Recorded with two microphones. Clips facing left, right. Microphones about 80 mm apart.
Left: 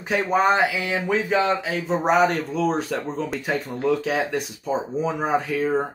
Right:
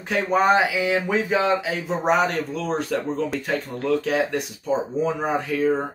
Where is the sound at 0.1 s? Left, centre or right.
Centre.